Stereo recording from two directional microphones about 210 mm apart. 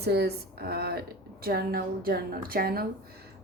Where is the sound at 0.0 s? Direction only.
50° right (ahead or behind).